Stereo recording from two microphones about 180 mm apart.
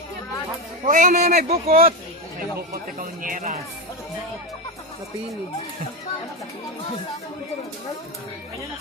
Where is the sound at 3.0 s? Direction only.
50° right (ahead or behind).